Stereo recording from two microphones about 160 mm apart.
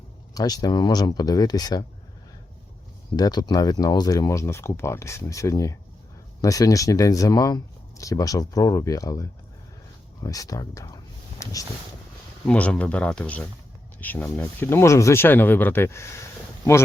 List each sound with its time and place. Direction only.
0.3 s speech: 25° left (ahead or behind)
3.2 s speech: 25° left (ahead or behind)
10.2 s speech: 20° left (ahead or behind)
12.5 s speech: 5° left (ahead or behind)